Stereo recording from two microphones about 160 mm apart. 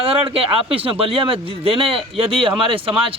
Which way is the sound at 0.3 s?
35° right (ahead or behind).